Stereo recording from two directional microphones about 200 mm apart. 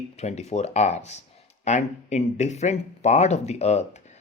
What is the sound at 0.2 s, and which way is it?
Speech, 35° left (ahead or behind).